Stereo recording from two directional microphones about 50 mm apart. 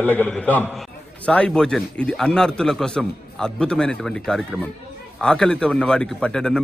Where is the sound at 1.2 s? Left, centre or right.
Left.